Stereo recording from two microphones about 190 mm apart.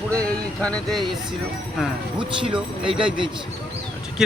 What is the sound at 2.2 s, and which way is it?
Speech, 25° right (ahead or behind).